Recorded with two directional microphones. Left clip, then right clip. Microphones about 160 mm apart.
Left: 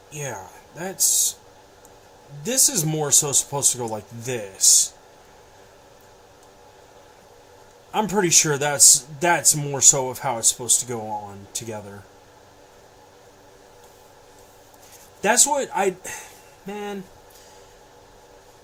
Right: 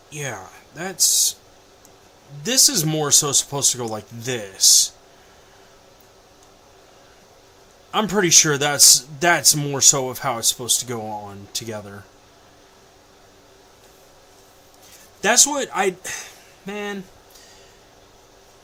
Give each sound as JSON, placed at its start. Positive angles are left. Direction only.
{"t": 0.1, "sound": "speech", "side_deg": -10}
{"t": 2.4, "sound": "a man's voice", "side_deg": -10}
{"t": 7.9, "sound": "a man's voice", "side_deg": -15}
{"t": 15.2, "sound": "a man's voice", "side_deg": -10}